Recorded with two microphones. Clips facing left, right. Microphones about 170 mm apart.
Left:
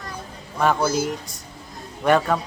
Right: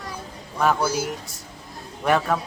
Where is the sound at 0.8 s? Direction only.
10° right (ahead or behind).